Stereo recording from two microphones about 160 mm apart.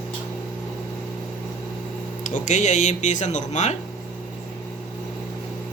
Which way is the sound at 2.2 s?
50° left (ahead or behind).